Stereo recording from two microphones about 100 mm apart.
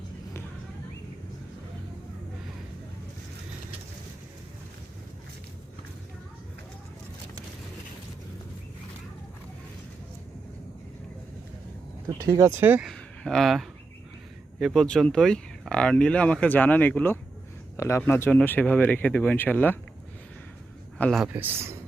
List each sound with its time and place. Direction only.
12.0 s speech: 30° right (ahead or behind)
12.8 s speech: 5° left (ahead or behind)
17.7 s a man's voice: 30° left (ahead or behind)
21.0 s a man's voice: 15° left (ahead or behind)
21.3 s speech: 20° right (ahead or behind)